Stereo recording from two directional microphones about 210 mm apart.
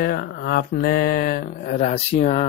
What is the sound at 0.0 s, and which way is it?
Speech, 45° left (ahead or behind).